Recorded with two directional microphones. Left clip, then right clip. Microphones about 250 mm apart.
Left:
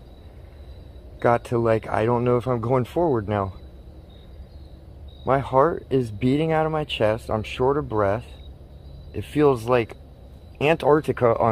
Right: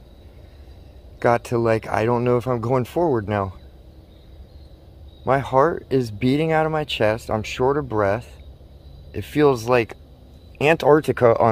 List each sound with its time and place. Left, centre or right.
1.2 s speech: right
5.2 s speech: right